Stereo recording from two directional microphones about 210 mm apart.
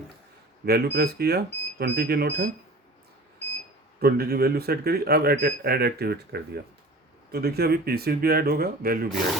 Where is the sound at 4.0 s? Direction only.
45° right (ahead or behind).